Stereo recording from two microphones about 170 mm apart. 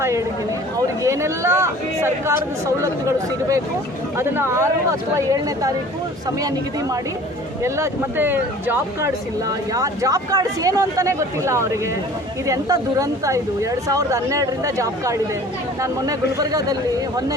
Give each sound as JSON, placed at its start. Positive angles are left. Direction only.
{"t": 0.8, "sound": "speech", "side_deg": -20}
{"t": 7.6, "sound": "speech", "side_deg": -15}